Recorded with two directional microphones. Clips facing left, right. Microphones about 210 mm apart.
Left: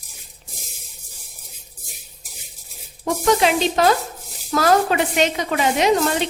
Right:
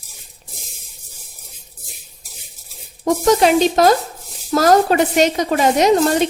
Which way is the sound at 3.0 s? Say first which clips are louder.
Right 4 dB; 40° right (ahead or behind).